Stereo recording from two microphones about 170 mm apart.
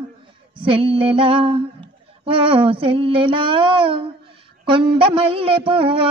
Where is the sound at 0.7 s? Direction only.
30° right (ahead or behind).